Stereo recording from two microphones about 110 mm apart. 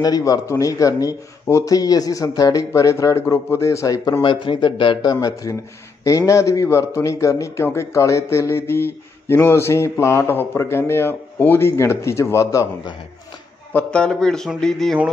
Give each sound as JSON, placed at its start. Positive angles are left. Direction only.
{"t": 0.0, "sound": "speech", "side_deg": 35}
{"t": 4.2, "sound": "a man's voice", "side_deg": 50}
{"t": 5.2, "sound": "speech", "side_deg": 30}
{"t": 13.7, "sound": "a man's voice", "side_deg": 10}